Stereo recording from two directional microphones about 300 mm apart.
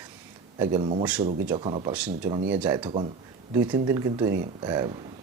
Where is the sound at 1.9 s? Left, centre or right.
Centre.